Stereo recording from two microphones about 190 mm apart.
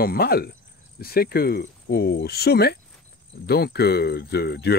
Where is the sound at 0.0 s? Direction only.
55° left (ahead or behind).